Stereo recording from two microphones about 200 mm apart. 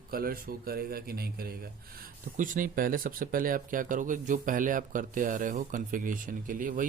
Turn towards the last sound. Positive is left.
turn(degrees=-40)  # may be behind; listen again after turning